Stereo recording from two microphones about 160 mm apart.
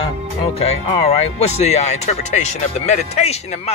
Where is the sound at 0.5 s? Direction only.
40° left (ahead or behind).